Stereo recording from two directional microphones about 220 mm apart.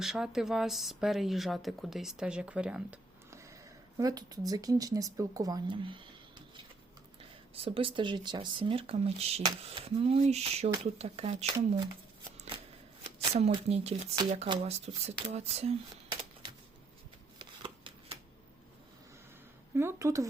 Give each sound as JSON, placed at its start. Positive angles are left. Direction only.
{"t": 0.0, "sound": "speech", "side_deg": 0}
{"t": 7.5, "sound": "speech", "side_deg": -25}
{"t": 13.1, "sound": "a woman's voice", "side_deg": -30}
{"t": 17.3, "sound": "shuffling cards", "side_deg": -20}
{"t": 19.7, "sound": "a sound", "side_deg": -10}